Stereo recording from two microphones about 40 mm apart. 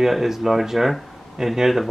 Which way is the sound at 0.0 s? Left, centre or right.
Centre.